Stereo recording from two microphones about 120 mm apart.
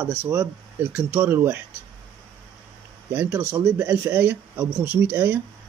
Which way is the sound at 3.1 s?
15° right (ahead or behind).